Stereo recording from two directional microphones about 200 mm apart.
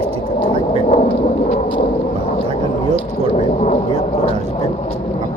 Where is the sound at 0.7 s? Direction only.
35° left (ahead or behind).